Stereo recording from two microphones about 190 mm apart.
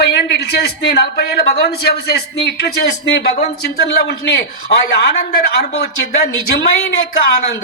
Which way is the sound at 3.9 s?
55° left (ahead or behind).